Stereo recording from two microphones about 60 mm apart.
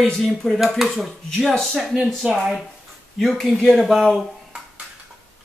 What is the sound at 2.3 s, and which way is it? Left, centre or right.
Speech, centre.